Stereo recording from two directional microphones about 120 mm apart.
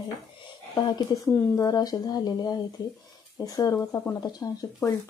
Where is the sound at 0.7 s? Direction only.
35° left (ahead or behind).